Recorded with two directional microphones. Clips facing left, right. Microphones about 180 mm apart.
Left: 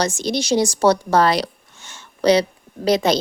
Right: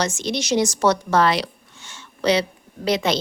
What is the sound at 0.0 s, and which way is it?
A woman's voice, 35° left (ahead or behind).